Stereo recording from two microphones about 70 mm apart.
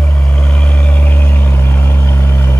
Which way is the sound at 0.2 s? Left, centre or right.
Centre.